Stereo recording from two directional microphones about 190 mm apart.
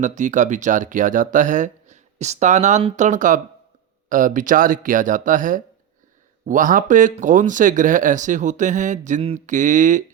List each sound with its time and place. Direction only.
0.0 s speech: 40° right (ahead or behind)